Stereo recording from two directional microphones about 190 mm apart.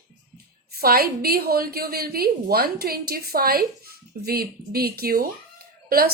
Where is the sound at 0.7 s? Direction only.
50° right (ahead or behind).